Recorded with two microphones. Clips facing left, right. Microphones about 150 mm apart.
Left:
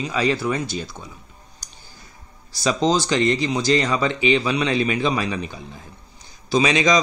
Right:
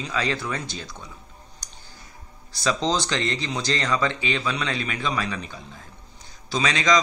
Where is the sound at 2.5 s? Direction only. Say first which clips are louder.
Left 4 dB; 10° left (ahead or behind).